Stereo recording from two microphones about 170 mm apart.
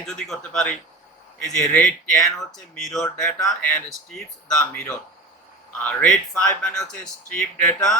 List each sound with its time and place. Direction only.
0.0 s a man's voice: centre (ahead or behind)
3.2 s speech: 20° left (ahead or behind)
3.6 s speech: 5° left (ahead or behind)